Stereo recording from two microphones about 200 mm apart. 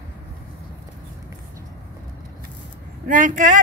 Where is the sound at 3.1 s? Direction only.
40° right (ahead or behind).